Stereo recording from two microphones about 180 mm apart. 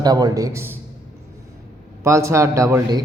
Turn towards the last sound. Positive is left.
turn(degrees=-20)  # may be behind; listen again after turning